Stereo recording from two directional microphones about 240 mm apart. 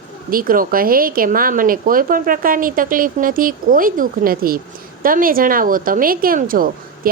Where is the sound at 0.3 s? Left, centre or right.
Right.